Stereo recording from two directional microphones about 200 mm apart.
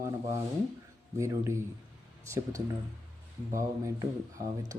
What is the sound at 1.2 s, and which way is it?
Speech, 15° right (ahead or behind).